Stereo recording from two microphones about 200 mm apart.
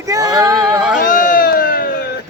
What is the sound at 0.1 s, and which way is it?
Female singing, 20° right (ahead or behind).